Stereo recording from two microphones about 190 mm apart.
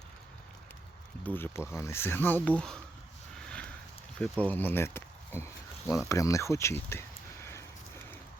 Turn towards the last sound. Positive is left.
turn(degrees=15)  # may be behind; listen again after turning